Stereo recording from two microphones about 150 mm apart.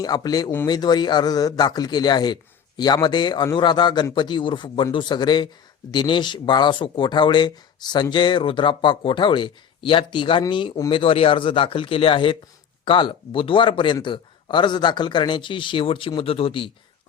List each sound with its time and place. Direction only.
0.0 s a man's voice: 25° left (ahead or behind)